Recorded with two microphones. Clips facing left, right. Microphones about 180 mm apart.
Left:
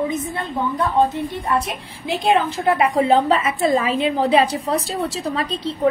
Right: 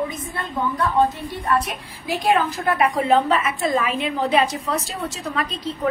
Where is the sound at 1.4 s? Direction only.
25° left (ahead or behind).